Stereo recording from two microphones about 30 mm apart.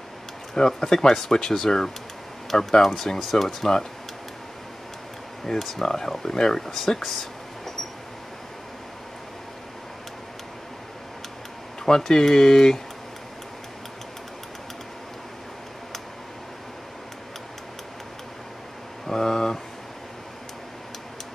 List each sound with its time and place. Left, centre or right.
0.6 s speech: left
0.9 s speech: centre
5.4 s speech: centre
11.8 s speech: centre
19.0 s a sound: centre